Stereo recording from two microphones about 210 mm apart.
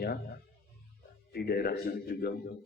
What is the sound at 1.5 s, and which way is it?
Speech, 45° left (ahead or behind).